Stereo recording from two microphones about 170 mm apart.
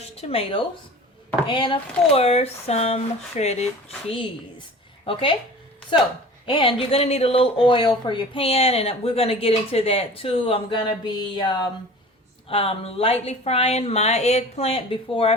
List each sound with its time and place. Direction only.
0.0 s a woman's voice: 35° left (ahead or behind)
6.4 s speech: 30° left (ahead or behind)